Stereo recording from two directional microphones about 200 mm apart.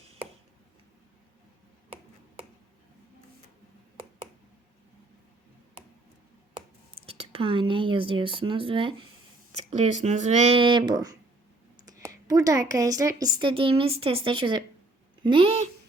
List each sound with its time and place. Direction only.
7.0 s a woman's voice: 30° right (ahead or behind)